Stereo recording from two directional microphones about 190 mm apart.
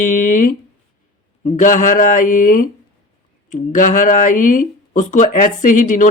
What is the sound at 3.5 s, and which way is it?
Speech, 45° left (ahead or behind).